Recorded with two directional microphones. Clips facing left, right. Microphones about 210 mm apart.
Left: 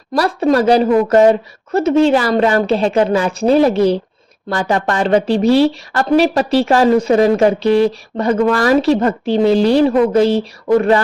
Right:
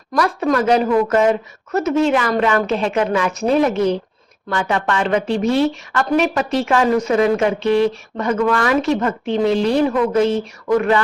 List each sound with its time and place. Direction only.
0.1 s speech: 30° left (ahead or behind)